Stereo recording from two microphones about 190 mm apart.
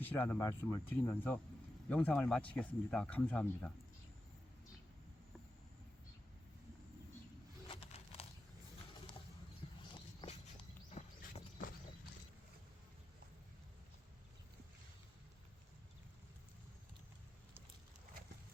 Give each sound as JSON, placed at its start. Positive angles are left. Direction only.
{"t": 0.0, "sound": "speech", "side_deg": 10}
{"t": 7.7, "sound": "crumpling", "side_deg": 30}
{"t": 9.6, "sound": "a sound", "side_deg": 25}
{"t": 10.9, "sound": "clip-clop", "side_deg": 35}